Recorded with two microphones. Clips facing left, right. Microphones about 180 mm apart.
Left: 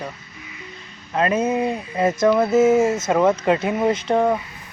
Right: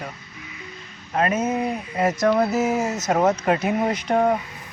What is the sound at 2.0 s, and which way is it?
Speech, 25° left (ahead or behind).